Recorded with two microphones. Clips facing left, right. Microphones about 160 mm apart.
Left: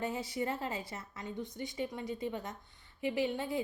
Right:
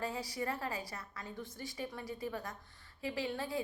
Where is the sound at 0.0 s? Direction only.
20° left (ahead or behind).